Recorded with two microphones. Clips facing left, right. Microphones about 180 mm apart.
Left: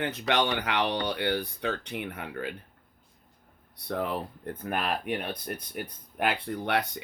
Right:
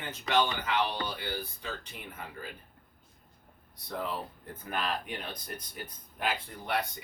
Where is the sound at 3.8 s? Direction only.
65° left (ahead or behind).